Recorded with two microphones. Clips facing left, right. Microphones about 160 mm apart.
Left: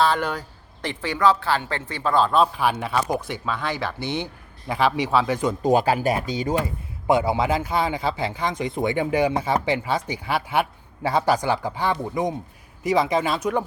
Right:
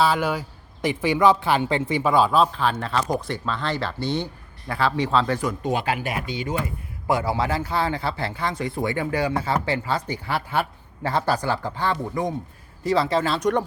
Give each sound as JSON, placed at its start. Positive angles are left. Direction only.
{"t": 0.0, "sound": "speech", "side_deg": -5}
{"t": 2.5, "sound": "speech", "side_deg": 10}
{"t": 5.6, "sound": "speech", "side_deg": 40}
{"t": 7.1, "sound": "speech", "side_deg": 20}